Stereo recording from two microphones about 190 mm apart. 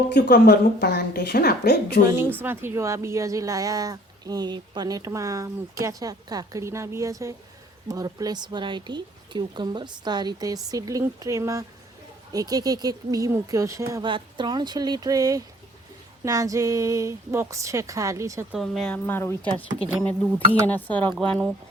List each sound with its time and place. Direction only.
0.1 s a woman's voice: 60° left (ahead or behind)
2.4 s speech: 10° right (ahead or behind)
18.5 s speech: centre (ahead or behind)
20.5 s speech: 10° left (ahead or behind)